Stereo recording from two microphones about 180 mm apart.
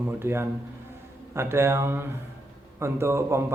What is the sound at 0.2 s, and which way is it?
Speech, 15° right (ahead or behind).